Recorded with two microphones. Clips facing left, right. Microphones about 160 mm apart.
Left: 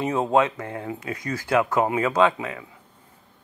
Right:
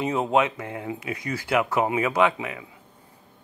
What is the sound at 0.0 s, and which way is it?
Speech, 15° right (ahead or behind).